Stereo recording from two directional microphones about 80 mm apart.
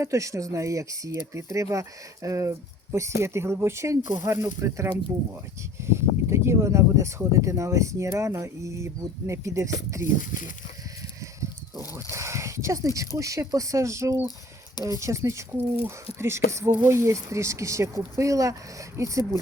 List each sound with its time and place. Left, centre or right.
0.0 s speech: right
12.1 s a sound: right
13.1 s speech: right